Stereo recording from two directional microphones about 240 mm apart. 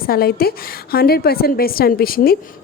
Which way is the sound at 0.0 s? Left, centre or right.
Left.